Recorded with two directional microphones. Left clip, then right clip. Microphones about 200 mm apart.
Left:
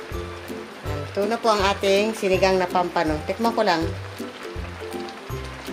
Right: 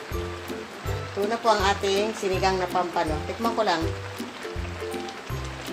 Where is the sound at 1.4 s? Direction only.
60° left (ahead or behind).